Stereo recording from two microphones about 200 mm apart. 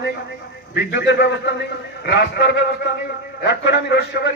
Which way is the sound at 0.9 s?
60° left (ahead or behind).